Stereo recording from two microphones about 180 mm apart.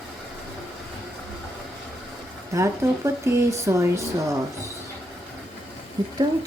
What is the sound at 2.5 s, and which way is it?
Speech, 15° right (ahead or behind).